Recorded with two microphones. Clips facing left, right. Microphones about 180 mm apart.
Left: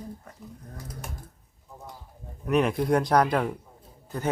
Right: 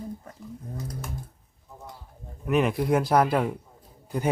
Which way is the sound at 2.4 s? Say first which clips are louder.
Even; centre (ahead or behind).